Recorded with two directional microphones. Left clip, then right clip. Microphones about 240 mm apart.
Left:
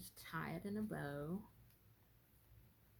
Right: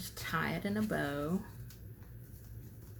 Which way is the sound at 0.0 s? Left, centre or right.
Left.